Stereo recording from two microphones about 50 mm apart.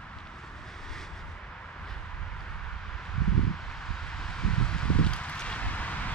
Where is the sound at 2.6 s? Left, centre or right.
Centre.